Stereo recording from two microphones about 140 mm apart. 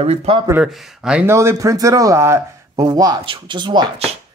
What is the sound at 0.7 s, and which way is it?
Speech, centre (ahead or behind).